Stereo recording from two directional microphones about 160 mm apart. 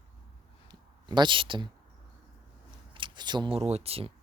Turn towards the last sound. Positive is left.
turn(degrees=-35)  # may be behind; listen again after turning